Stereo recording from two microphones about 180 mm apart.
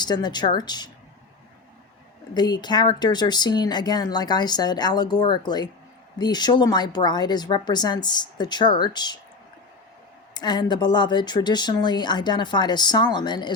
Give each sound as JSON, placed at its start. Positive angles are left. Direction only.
{"t": 0.0, "sound": "speech", "side_deg": 25}
{"t": 2.3, "sound": "speech", "side_deg": 25}
{"t": 10.3, "sound": "speech", "side_deg": 25}